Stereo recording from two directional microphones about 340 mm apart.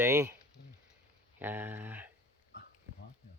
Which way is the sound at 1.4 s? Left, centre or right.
Centre.